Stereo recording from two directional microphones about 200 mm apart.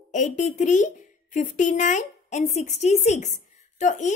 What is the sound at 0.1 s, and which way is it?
A woman's voice, 35° left (ahead or behind).